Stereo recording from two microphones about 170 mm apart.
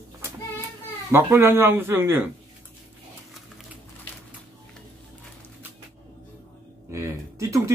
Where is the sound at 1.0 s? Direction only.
15° right (ahead or behind).